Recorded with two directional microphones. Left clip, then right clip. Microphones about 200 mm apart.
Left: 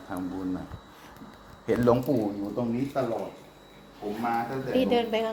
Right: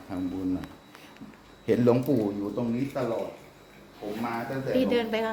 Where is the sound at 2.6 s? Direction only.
10° right (ahead or behind).